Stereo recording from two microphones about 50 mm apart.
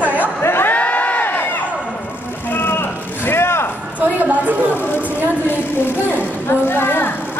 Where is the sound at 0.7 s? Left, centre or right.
Left.